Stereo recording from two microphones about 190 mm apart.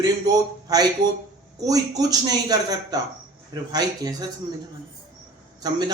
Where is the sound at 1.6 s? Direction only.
20° right (ahead or behind).